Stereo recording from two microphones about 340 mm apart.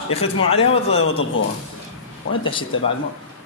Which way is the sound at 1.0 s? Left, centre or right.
Left.